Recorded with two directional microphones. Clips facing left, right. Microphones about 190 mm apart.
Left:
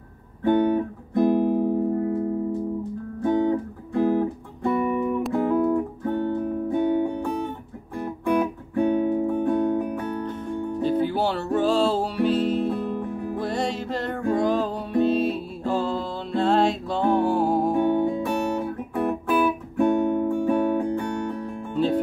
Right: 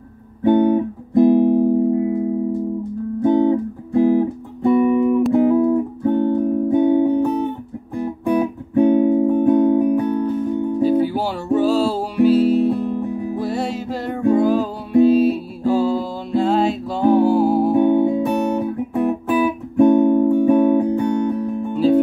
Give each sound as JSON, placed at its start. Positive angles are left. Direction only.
{"t": 0.5, "sound": "guitar", "side_deg": -20}
{"t": 3.2, "sound": "music", "side_deg": -20}
{"t": 10.2, "sound": "music", "side_deg": -10}